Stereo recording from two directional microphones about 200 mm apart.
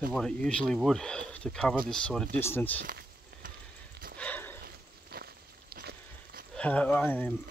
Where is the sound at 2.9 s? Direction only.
45° right (ahead or behind).